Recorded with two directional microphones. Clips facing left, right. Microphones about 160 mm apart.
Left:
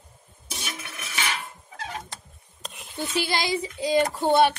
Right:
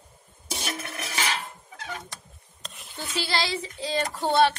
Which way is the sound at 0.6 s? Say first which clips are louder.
Right 4 dB; 35° right (ahead or behind).